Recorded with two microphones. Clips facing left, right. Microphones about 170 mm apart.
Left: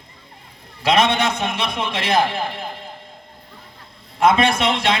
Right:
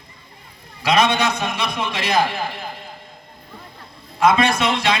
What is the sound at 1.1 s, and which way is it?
Speech, 25° left (ahead or behind).